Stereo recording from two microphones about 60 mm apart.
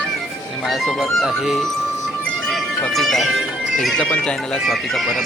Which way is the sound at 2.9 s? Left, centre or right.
Centre.